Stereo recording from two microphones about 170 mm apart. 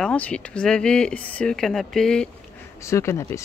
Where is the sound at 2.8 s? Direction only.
15° left (ahead or behind).